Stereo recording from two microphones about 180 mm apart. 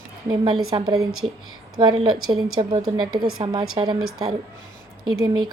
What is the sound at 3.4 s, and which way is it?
Speech, 25° right (ahead or behind).